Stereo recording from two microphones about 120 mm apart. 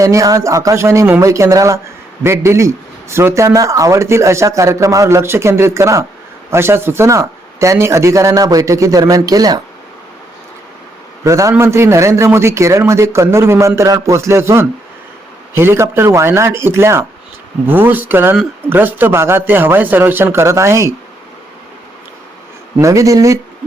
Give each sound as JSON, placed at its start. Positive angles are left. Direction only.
{"t": 0.0, "sound": "speech", "side_deg": -25}
{"t": 11.2, "sound": "speech", "side_deg": -25}
{"t": 22.8, "sound": "speech", "side_deg": -25}